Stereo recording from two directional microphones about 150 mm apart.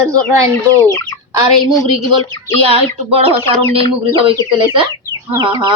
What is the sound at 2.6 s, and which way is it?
Speech, 40° right (ahead or behind).